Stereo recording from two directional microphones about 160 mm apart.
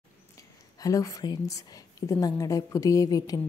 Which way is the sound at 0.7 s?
20° left (ahead or behind).